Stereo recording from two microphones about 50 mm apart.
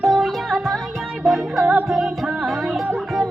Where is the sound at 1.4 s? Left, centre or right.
Centre.